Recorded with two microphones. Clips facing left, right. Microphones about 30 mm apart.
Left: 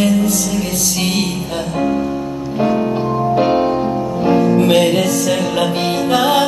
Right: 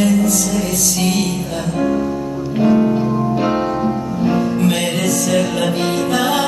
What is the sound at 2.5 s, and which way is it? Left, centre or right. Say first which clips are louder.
Music: right 2 dB; centre.